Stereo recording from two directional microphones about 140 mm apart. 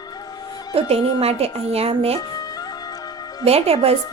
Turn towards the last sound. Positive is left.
turn(degrees=-45)  # may be behind; listen again after turning